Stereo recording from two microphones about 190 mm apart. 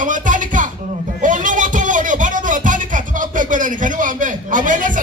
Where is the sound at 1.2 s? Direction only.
45° right (ahead or behind).